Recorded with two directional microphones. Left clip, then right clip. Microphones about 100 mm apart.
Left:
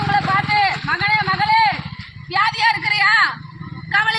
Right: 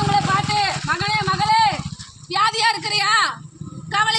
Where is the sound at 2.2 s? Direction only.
35° right (ahead or behind).